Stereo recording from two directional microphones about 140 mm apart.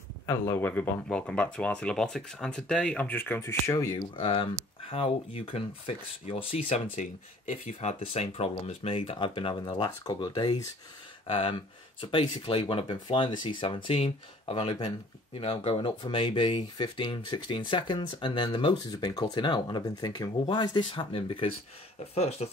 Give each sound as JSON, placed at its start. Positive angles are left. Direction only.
{"t": 0.3, "sound": "speech", "side_deg": 15}
{"t": 4.2, "sound": "speech", "side_deg": 40}
{"t": 7.0, "sound": "speech", "side_deg": 55}
{"t": 11.2, "sound": "speech", "side_deg": 40}